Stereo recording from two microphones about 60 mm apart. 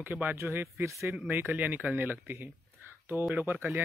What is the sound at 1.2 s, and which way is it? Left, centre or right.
Speech, right.